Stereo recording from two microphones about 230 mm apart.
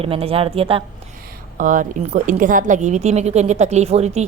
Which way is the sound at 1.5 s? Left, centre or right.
Right.